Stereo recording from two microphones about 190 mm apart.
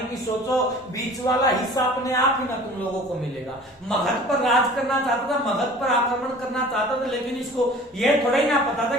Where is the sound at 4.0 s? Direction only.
Centre (ahead or behind).